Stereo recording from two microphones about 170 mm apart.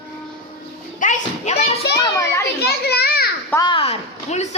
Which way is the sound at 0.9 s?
50° left (ahead or behind).